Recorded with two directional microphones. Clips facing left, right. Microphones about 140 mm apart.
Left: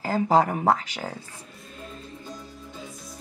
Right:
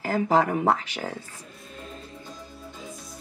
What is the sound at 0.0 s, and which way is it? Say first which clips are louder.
Speech: left 1 dB; 35° left (ahead or behind).